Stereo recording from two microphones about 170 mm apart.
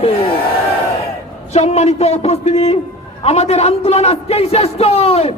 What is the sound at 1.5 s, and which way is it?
A man's voice, 40° left (ahead or behind).